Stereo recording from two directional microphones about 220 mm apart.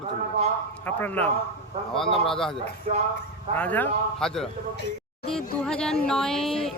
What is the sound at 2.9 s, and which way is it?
Speech, 30° right (ahead or behind).